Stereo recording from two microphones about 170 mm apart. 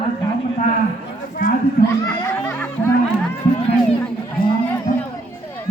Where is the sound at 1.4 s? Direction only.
50° left (ahead or behind).